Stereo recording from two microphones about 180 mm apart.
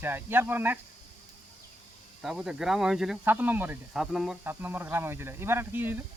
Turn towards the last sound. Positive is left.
turn(degrees=-10)  # may be behind; listen again after turning